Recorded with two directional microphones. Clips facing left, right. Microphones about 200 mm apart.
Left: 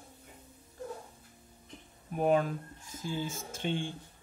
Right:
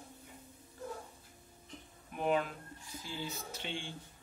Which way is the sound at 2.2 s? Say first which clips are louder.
Left 5 dB; 45° left (ahead or behind).